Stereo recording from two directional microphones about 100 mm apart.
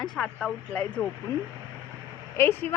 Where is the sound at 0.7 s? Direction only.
15° left (ahead or behind).